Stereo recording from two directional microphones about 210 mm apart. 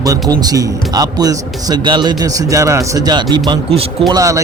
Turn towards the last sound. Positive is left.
turn(degrees=-15)  # may be behind; listen again after turning